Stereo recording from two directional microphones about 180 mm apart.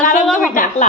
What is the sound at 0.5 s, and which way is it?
Speech, 45° left (ahead or behind).